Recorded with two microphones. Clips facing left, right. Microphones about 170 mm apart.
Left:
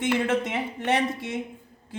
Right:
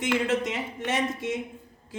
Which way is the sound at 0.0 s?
55° left (ahead or behind).